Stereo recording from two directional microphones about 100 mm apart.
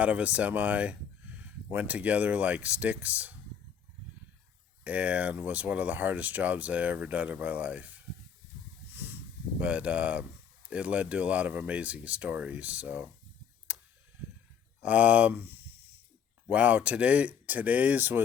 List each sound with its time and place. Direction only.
0.0 s speech: 15° right (ahead or behind)
4.8 s speech: 15° right (ahead or behind)
9.6 s speech: 15° right (ahead or behind)
14.8 s speech: 15° right (ahead or behind)